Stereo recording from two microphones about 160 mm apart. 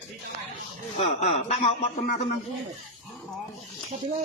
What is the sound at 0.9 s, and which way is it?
A man's voice, 45° left (ahead or behind).